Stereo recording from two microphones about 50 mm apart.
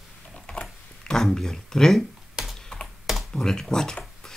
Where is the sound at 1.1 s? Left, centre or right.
Centre.